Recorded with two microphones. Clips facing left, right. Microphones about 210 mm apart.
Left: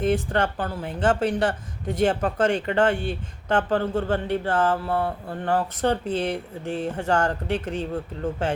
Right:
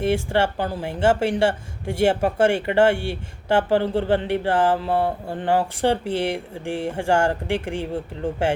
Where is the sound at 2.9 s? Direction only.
75° right (ahead or behind).